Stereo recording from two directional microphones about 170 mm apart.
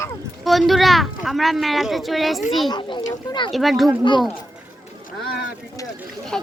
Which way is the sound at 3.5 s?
Centre (ahead or behind).